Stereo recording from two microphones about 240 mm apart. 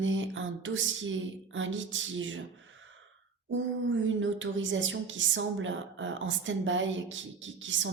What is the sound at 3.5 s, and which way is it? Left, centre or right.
Speech, right.